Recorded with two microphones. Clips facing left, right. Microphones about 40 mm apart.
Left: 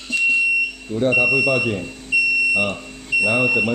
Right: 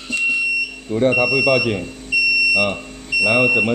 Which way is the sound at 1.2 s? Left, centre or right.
Centre.